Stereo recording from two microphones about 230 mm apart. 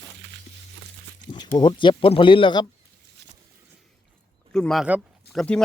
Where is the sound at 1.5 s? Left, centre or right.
Left.